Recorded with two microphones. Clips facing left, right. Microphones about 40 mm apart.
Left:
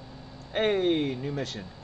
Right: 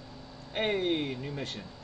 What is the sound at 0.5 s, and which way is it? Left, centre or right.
Speech, centre.